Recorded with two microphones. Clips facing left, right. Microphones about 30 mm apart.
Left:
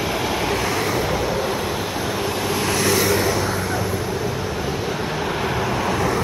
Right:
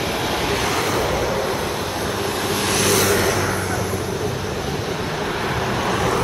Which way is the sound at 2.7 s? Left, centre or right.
Right.